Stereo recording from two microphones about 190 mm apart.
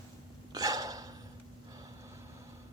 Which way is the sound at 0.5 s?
20° right (ahead or behind).